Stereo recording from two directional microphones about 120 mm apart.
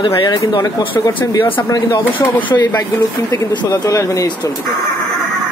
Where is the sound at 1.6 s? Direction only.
30° left (ahead or behind).